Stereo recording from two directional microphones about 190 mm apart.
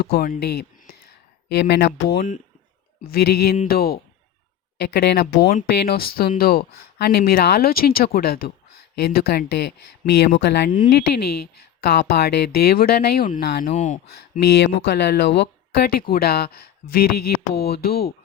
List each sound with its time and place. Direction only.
0.0 s speech: 55° left (ahead or behind)
13.7 s speech: 40° left (ahead or behind)
14.3 s speech: 60° left (ahead or behind)